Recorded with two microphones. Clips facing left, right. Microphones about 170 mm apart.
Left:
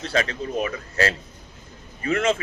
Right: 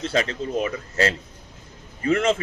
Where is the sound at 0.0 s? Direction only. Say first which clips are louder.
Right 1 dB; 25° right (ahead or behind).